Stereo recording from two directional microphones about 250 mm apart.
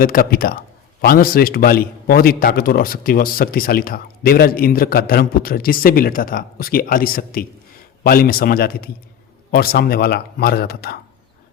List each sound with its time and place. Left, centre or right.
0.0 s a man's voice: left